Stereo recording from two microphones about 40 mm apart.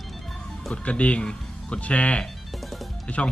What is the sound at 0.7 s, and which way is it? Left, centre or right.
Speech, left.